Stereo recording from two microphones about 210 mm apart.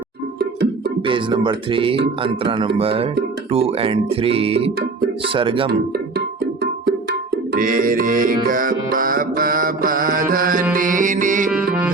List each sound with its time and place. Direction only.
1.0 s speech: 25° right (ahead or behind)
5.9 s music: 50° right (ahead or behind)
11.5 s music: 5° right (ahead or behind)